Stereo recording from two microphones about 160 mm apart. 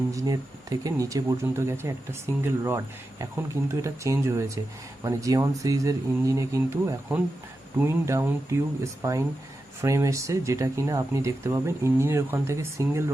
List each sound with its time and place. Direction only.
0.1 s speech: 20° right (ahead or behind)
7.8 s speech: 15° right (ahead or behind)